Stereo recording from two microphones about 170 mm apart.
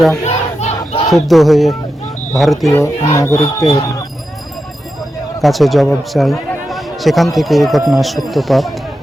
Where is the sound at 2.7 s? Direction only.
20° left (ahead or behind).